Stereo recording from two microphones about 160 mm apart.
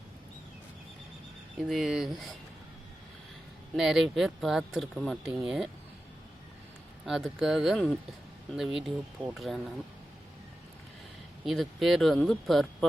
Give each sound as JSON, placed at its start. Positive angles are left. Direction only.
{"t": 1.5, "sound": "speech", "side_deg": 0}
{"t": 3.8, "sound": "speech", "side_deg": 0}
{"t": 7.0, "sound": "speech", "side_deg": 0}
{"t": 11.4, "sound": "speech", "side_deg": 0}